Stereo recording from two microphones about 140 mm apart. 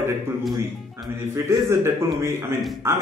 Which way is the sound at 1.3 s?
20° right (ahead or behind).